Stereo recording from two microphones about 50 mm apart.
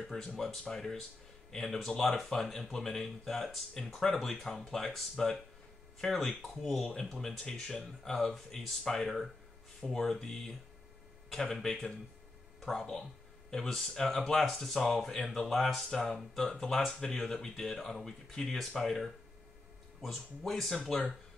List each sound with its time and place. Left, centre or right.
0.0 s speech: centre
11.5 s speech: centre
12.5 s a sound: centre
13.5 s speech: centre
16.1 s speech: centre